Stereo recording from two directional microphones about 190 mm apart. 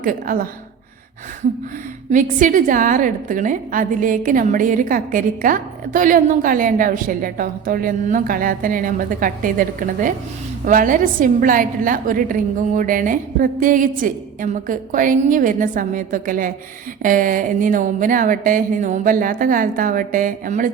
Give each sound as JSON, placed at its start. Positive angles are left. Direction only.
{"t": 0.0, "sound": "a woman's voice", "side_deg": -45}
{"t": 2.4, "sound": "a woman's voice", "side_deg": -45}